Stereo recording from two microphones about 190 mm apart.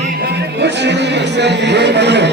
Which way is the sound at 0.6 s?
65° right (ahead or behind).